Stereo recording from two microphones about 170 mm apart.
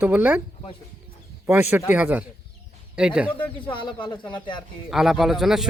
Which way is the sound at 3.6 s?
30° left (ahead or behind).